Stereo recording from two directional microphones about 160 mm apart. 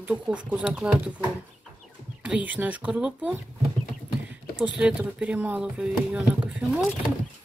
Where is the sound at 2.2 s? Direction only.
10° right (ahead or behind).